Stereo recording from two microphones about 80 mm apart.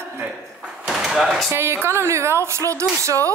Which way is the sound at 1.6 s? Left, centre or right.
Right.